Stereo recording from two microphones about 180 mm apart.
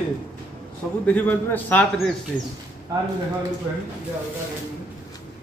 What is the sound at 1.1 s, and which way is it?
Speech, 10° left (ahead or behind).